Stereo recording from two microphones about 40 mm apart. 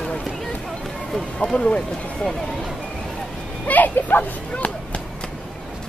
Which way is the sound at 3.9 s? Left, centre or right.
Left.